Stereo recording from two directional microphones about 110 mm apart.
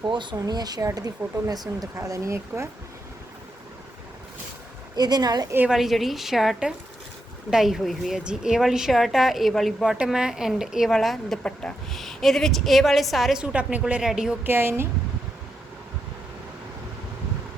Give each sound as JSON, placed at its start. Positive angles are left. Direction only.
{"t": 0.0, "sound": "speech", "side_deg": -45}
{"t": 4.9, "sound": "speech", "side_deg": -40}
{"t": 5.6, "sound": "a woman's voice", "side_deg": 0}
{"t": 14.4, "sound": "speech", "side_deg": -20}